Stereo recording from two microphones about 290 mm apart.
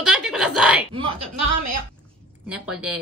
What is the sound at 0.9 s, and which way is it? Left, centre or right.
Speech, centre.